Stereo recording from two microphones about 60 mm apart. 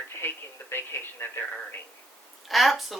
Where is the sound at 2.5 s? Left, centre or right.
Centre.